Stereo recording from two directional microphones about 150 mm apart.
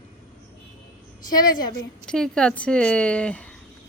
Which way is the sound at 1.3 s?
25° left (ahead or behind).